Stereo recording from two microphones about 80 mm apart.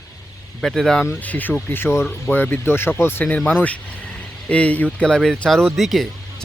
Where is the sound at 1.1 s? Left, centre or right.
Left.